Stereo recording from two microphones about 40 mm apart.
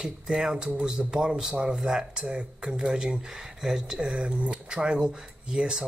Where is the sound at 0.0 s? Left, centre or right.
Centre.